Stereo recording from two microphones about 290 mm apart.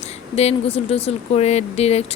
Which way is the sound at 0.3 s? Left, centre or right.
Left.